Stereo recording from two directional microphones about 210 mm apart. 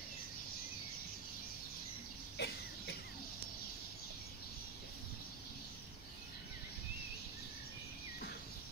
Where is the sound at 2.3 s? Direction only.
50° left (ahead or behind).